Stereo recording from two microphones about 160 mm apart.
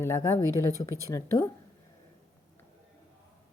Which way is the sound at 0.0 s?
15° left (ahead or behind).